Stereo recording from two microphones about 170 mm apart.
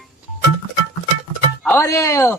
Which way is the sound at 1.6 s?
15° left (ahead or behind).